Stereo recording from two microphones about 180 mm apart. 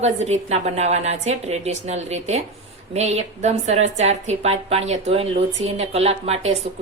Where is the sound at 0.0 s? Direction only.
40° right (ahead or behind).